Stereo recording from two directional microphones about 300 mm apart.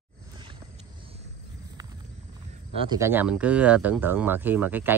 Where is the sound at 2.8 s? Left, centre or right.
Centre.